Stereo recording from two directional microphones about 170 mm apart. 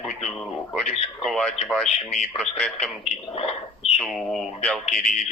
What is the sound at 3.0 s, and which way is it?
Speech, 35° left (ahead or behind).